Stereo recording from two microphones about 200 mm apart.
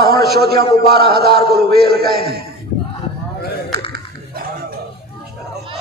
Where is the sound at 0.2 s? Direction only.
55° right (ahead or behind).